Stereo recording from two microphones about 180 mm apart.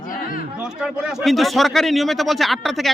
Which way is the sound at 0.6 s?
5° right (ahead or behind).